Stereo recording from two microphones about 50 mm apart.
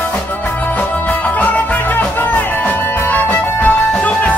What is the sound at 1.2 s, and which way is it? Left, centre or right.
Music, left.